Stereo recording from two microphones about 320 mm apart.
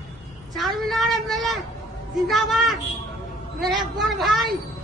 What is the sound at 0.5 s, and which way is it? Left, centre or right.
A woman's voice, centre.